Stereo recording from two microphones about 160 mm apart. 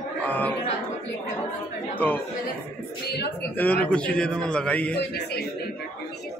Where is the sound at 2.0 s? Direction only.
10° left (ahead or behind).